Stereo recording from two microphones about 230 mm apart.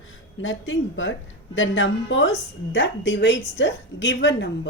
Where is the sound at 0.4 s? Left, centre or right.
Left.